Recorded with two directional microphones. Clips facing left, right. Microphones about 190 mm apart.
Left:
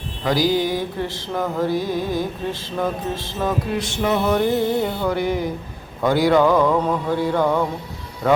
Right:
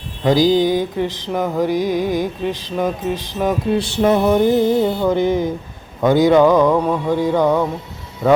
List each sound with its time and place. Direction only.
0.3 s mantra: 20° right (ahead or behind)
3.8 s music: 35° right (ahead or behind)
4.3 s music: 20° right (ahead or behind)
6.0 s mantra: 20° right (ahead or behind)